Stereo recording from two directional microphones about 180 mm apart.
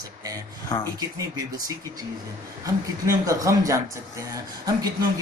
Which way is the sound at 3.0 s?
20° right (ahead or behind).